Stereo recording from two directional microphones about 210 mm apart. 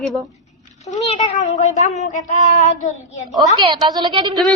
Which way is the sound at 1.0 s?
30° left (ahead or behind).